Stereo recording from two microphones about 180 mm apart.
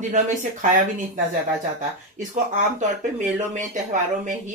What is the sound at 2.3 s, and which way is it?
Speech, 45° right (ahead or behind).